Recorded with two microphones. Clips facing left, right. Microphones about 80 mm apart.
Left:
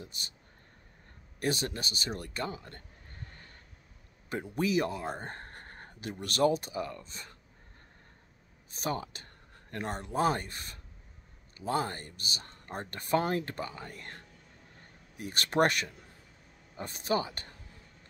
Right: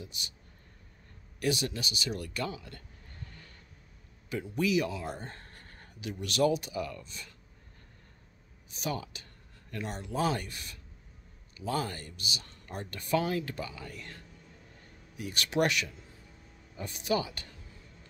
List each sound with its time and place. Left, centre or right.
0.0 s speech: left
1.4 s speech: left
4.3 s speech: left
8.6 s speech: left